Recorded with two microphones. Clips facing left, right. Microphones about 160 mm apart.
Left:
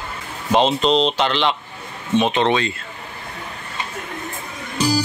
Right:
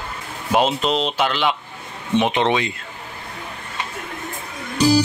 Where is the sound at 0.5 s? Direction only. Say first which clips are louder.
Left 2 dB; 5° right (ahead or behind).